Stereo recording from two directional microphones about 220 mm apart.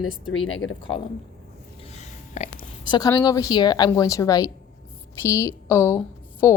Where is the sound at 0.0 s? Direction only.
70° left (ahead or behind).